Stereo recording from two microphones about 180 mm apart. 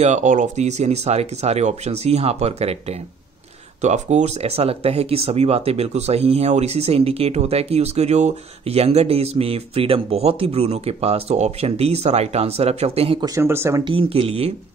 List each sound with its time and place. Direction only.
0.0 s speech: 40° right (ahead or behind)
13.3 s speech: 15° right (ahead or behind)
13.8 s speech: 30° right (ahead or behind)